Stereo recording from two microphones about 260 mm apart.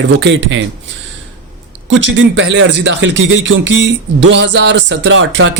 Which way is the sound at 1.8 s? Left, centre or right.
Right.